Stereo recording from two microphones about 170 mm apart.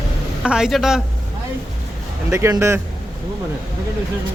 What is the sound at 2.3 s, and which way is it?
Speech, 15° right (ahead or behind).